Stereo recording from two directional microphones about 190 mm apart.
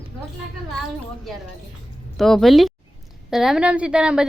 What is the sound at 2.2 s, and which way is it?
A woman's voice, centre (ahead or behind).